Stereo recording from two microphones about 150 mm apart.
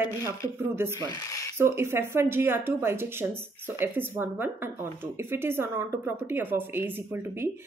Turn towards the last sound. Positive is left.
turn(degrees=-15)  # may be behind; listen again after turning